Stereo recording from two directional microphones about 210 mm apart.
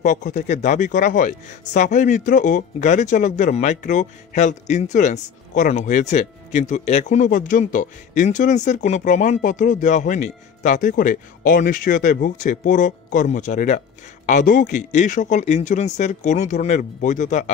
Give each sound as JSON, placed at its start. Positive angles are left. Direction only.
{"t": 0.0, "sound": "speech", "side_deg": 35}